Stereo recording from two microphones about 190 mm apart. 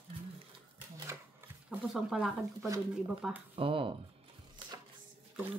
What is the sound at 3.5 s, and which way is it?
Speech, 30° right (ahead or behind).